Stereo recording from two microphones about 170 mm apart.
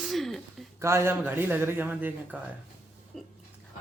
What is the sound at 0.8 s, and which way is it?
A man's voice, 15° right (ahead or behind).